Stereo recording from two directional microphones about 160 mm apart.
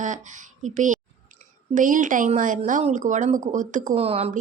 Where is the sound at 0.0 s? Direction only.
50° right (ahead or behind).